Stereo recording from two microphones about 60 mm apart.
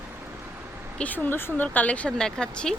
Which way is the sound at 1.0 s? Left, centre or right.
Left.